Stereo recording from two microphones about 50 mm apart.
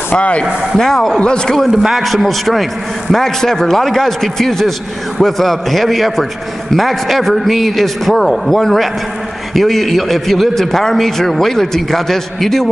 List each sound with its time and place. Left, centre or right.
0.1 s speech: left
0.7 s a man's voice: centre
1.7 s a man's voice: centre